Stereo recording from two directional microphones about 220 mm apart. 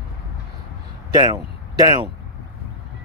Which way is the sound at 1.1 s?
15° right (ahead or behind).